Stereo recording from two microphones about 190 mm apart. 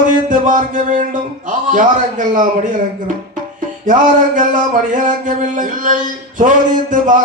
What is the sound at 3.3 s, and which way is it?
Music, 45° right (ahead or behind).